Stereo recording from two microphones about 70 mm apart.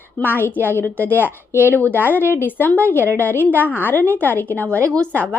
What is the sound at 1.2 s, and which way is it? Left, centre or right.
A woman's voice, right.